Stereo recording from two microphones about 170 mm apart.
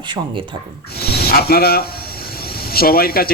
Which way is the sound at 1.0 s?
65° left (ahead or behind).